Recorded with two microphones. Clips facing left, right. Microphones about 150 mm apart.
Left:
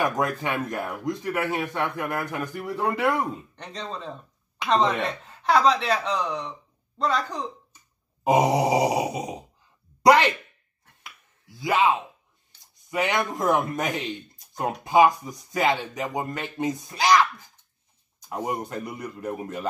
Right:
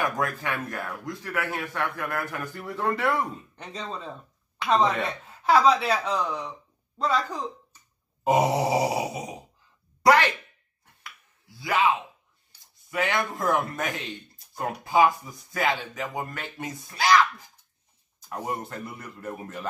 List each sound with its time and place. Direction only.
0.0 s speech: 20° left (ahead or behind)
3.5 s speech: 5° right (ahead or behind)
8.2 s a man's voice: 15° left (ahead or behind)
11.1 s finger snapping: 20° left (ahead or behind)
12.9 s speech: 20° left (ahead or behind)
18.3 s a man's voice: 15° left (ahead or behind)